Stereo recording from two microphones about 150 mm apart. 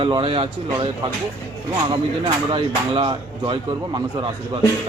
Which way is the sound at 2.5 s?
35° right (ahead or behind).